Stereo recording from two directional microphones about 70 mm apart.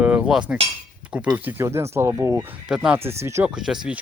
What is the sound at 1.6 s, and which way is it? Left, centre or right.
Speech, right.